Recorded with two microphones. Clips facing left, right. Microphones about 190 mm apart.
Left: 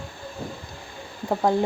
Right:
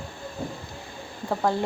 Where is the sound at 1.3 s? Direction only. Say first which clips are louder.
Left 3 dB; 15° left (ahead or behind).